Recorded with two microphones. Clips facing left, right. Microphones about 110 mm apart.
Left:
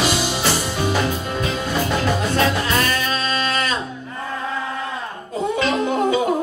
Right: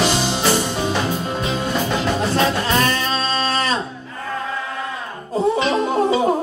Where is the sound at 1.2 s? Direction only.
20° right (ahead or behind).